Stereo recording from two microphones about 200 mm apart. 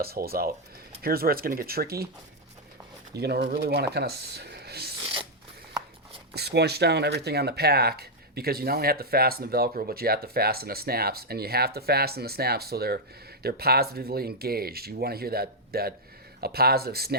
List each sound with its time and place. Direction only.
0.0 s speech: 50° right (ahead or behind)
3.2 s speech: 55° right (ahead or behind)
6.3 s speech: 55° right (ahead or behind)